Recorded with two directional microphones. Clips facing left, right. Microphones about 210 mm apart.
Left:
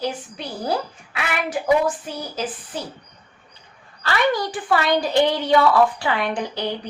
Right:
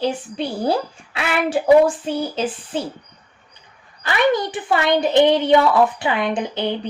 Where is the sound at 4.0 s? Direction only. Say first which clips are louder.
Right 3 dB; 20° right (ahead or behind).